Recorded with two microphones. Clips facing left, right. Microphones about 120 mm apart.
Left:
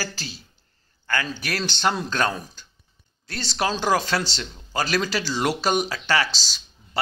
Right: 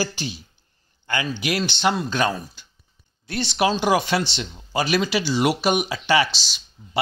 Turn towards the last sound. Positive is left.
turn(degrees=-15)  # may be behind; listen again after turning